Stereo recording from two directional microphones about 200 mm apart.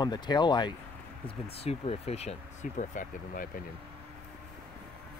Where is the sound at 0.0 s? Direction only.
20° left (ahead or behind); by 3.4 s 40° left (ahead or behind).